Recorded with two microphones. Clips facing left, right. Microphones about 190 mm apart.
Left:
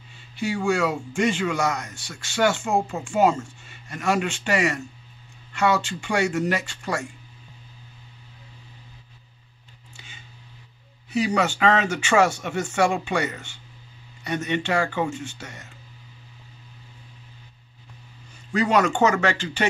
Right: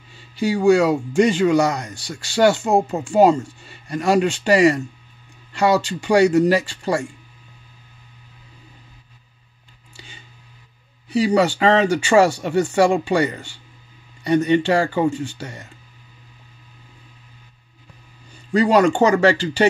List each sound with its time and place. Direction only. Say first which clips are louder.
0.4 s speech: right 8 dB; 35° right (ahead or behind)
9.9 s a sound: right 5 dB; 35° right (ahead or behind)
11.1 s speech: right 6 dB; 35° right (ahead or behind)
18.5 s speech: right 6 dB; 35° right (ahead or behind)